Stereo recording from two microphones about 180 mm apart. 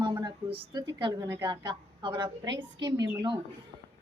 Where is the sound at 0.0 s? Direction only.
25° right (ahead or behind).